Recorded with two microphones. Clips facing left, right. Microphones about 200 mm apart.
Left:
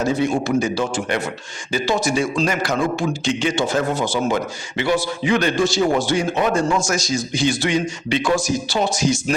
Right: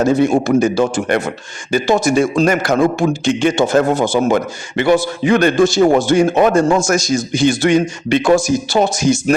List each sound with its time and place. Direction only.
0.0 s a man's voice: 45° right (ahead or behind)